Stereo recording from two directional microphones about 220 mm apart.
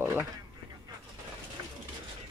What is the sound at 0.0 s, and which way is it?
Radio, 10° right (ahead or behind).